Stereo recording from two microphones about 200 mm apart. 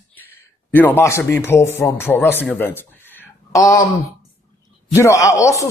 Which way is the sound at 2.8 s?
10° left (ahead or behind).